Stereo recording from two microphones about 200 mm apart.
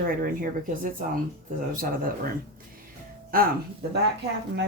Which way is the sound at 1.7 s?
45° right (ahead or behind).